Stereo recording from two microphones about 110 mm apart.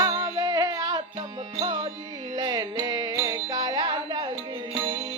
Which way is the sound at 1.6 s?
45° right (ahead or behind).